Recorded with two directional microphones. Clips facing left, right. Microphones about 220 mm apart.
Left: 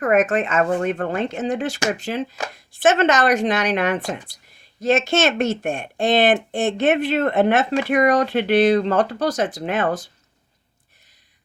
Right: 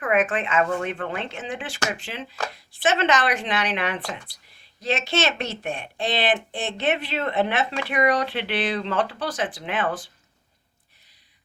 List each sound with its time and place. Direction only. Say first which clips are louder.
0.0 s speech: left 5 dB; 40° left (ahead or behind)